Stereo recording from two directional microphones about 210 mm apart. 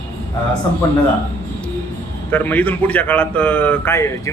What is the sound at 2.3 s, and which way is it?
A man's voice, 10° left (ahead or behind).